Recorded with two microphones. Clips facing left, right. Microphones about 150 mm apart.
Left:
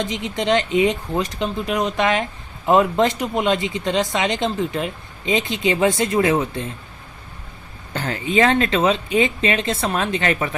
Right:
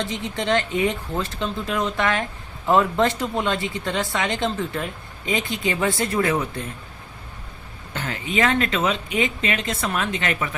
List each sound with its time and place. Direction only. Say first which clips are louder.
0.0 s speech: left 3 dB; 15° left (ahead or behind)
7.9 s speech: left 5 dB; 35° left (ahead or behind)